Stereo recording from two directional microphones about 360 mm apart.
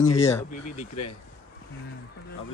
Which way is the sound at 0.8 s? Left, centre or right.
Left.